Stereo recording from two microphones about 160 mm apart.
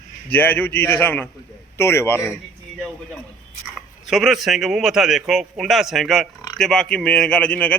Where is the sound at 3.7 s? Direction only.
Centre (ahead or behind).